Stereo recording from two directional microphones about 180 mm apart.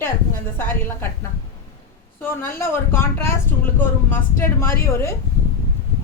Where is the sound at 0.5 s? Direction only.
10° left (ahead or behind).